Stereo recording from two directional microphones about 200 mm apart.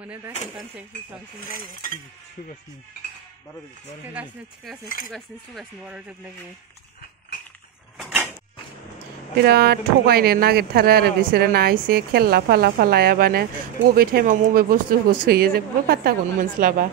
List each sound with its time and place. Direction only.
0.0 s speech: 5° right (ahead or behind)
4.1 s speech: 5° right (ahead or behind)
4.8 s cutlery: 45° left (ahead or behind)
5.1 s speech: centre (ahead or behind)
8.0 s mechanisms: 5° right (ahead or behind)
9.4 s speech: 50° right (ahead or behind)